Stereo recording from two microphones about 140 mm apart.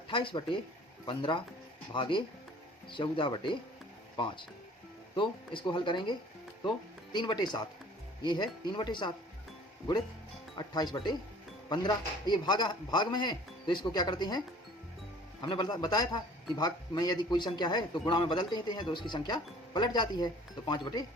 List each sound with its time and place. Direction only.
0.1 s a man's voice: 35° left (ahead or behind)
10.5 s a man's voice: 30° left (ahead or behind)